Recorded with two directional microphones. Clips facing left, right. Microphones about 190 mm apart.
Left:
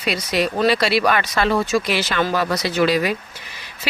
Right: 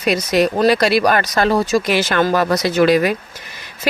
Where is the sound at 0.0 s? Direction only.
45° right (ahead or behind).